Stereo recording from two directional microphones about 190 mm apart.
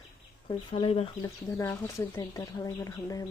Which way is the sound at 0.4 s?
30° left (ahead or behind).